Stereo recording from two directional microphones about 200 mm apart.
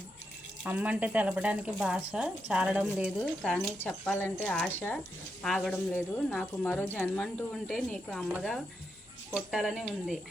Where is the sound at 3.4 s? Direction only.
10° left (ahead or behind).